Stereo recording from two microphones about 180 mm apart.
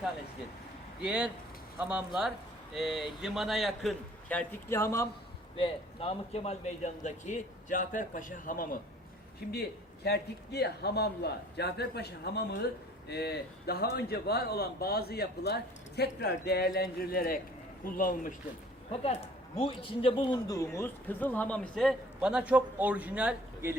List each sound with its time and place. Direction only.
1.0 s a man's voice: 5° right (ahead or behind)
4.7 s a man's voice: 15° left (ahead or behind)
5.5 s a man's voice: 30° left (ahead or behind); by 8.8 s 50° left (ahead or behind)
9.5 s a man's voice: 60° left (ahead or behind)
18.9 s a man's voice: 35° left (ahead or behind); by 23.7 s 10° right (ahead or behind)